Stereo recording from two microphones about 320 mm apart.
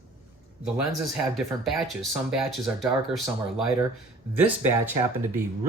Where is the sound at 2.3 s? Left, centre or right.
Centre.